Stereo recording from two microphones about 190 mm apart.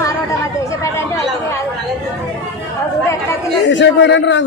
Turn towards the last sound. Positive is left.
turn(degrees=70)  # may be behind; listen again after turning